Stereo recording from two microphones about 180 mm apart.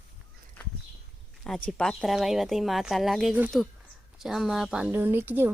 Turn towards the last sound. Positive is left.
turn(degrees=-10)  # may be behind; listen again after turning